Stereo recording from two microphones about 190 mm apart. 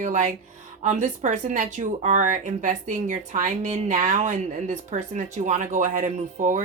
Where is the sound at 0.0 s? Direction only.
40° right (ahead or behind).